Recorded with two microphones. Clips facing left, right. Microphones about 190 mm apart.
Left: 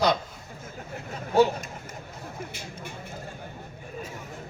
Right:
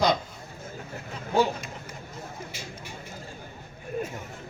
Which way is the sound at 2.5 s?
55° left (ahead or behind).